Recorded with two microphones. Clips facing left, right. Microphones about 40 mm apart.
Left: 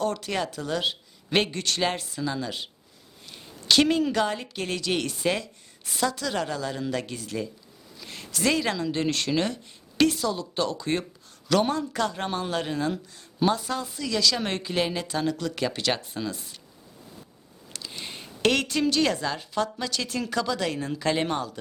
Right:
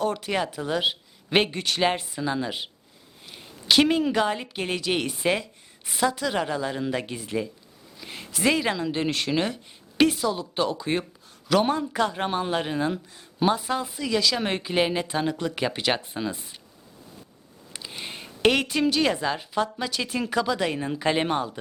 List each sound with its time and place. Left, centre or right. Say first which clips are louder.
0.0 s a man's voice: right 2 dB; centre
17.7 s a man's voice: right 1 dB; centre